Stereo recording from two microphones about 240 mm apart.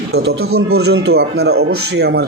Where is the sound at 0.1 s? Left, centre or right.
Right.